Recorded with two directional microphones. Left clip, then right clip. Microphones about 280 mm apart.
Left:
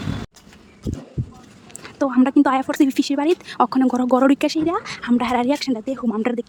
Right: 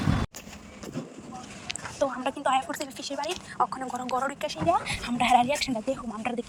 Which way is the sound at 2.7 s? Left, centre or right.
Left.